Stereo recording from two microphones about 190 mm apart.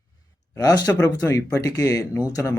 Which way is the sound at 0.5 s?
20° left (ahead or behind).